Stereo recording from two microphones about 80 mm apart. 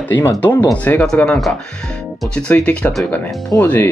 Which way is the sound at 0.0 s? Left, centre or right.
Left.